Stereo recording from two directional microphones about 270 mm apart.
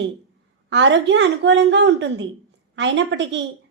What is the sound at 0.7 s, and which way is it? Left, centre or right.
A woman's voice, right.